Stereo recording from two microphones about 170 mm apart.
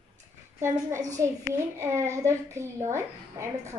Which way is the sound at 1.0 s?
20° right (ahead or behind).